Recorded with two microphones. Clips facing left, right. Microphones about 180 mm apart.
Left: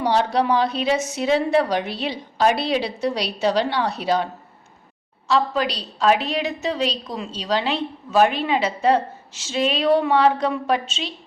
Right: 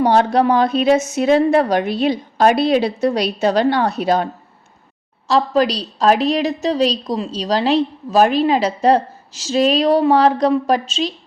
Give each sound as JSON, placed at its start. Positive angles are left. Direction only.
{"t": 0.0, "sound": "a woman's voice", "side_deg": -50}
{"t": 5.3, "sound": "a woman's voice", "side_deg": -40}